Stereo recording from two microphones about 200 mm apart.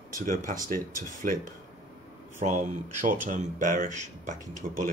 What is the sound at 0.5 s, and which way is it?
Speech, 45° right (ahead or behind).